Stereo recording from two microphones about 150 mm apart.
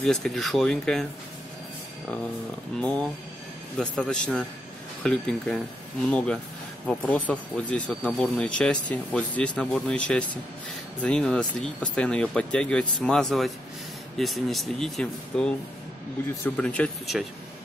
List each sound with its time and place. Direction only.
0.0 s speech: 5° left (ahead or behind)
2.8 s speech: 5° left (ahead or behind)